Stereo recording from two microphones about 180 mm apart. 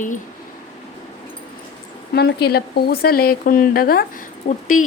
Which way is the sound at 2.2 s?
60° left (ahead or behind).